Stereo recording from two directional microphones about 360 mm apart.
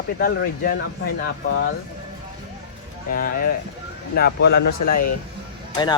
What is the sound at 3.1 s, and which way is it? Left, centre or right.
Speech, left.